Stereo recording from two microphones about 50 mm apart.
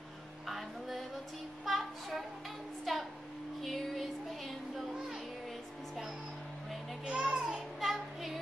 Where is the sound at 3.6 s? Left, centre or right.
Centre.